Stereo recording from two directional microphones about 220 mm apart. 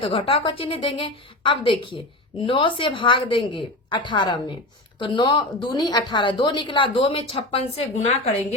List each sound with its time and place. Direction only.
0.0 s a woman's voice: 25° left (ahead or behind)